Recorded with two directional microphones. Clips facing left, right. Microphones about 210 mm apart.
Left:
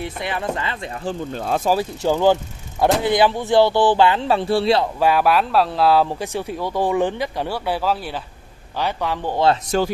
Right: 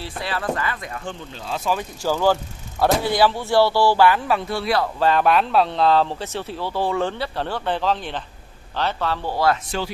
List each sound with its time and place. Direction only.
0.0 s speech: 20° left (ahead or behind)
1.3 s speech: 50° left (ahead or behind)
2.0 s speech: 20° left (ahead or behind)
4.9 s speech: 10° left (ahead or behind)